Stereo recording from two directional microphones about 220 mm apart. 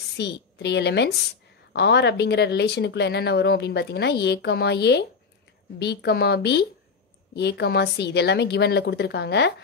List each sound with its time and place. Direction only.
0.2 s speech: 50° left (ahead or behind)